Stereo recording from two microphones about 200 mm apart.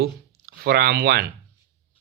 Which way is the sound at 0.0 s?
50° right (ahead or behind).